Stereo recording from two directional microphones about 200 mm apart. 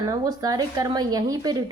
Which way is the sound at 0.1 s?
20° right (ahead or behind).